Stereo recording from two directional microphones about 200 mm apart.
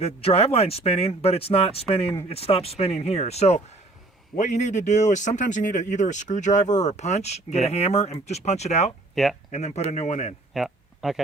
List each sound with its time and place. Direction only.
0.0 s a man's voice: 30° left (ahead or behind)
9.2 s speech: centre (ahead or behind)
9.5 s a man's voice: 35° left (ahead or behind)
10.5 s a sound: centre (ahead or behind)